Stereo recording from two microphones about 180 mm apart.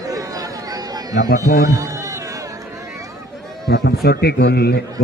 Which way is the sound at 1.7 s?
20° right (ahead or behind).